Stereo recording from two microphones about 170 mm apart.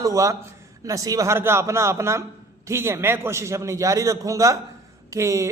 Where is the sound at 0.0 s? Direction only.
20° right (ahead or behind).